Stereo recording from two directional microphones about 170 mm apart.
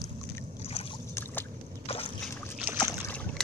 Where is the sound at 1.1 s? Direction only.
15° left (ahead or behind).